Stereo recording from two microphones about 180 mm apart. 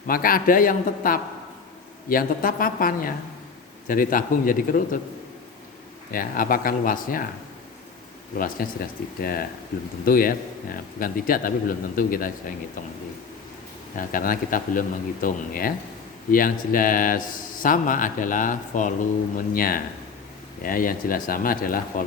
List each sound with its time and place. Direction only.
0.1 s a man's voice: 55° left (ahead or behind)
6.1 s a man's voice: 50° left (ahead or behind)
8.4 s a man's voice: 55° left (ahead or behind)
13.9 s a man's voice: 50° left (ahead or behind)